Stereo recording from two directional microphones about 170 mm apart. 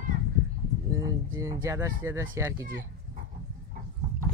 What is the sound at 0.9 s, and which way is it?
Speech, 15° right (ahead or behind).